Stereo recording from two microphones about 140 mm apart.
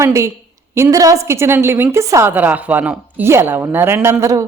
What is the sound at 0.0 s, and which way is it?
A woman's voice, 20° right (ahead or behind).